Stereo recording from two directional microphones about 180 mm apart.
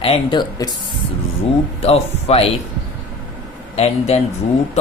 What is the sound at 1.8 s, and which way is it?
Speech, 35° left (ahead or behind).